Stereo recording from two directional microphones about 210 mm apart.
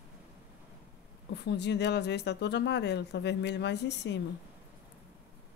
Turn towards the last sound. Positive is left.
turn(degrees=55)  # may be behind; listen again after turning